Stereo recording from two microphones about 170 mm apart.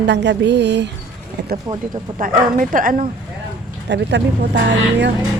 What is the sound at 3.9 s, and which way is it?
Speech, 90° right.